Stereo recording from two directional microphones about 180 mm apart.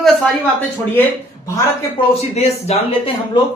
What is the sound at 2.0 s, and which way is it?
Speech, 35° left (ahead or behind).